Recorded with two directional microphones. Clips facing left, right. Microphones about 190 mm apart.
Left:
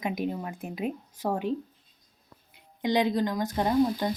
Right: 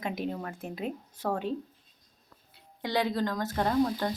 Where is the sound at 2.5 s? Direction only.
20° left (ahead or behind).